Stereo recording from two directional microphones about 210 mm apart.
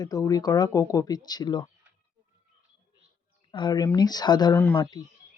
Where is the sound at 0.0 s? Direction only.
15° left (ahead or behind).